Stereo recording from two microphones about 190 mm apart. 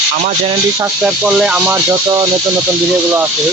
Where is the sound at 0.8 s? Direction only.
5° right (ahead or behind).